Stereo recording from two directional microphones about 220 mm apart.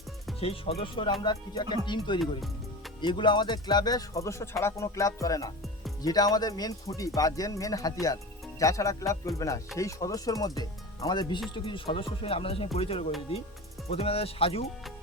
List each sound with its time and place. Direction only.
0.3 s speech: 25° left (ahead or behind)
2.2 s music: centre (ahead or behind)
3.0 s speech: 20° left (ahead or behind)